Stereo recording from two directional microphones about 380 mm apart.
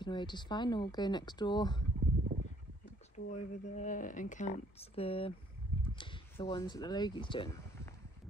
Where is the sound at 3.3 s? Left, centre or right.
Centre.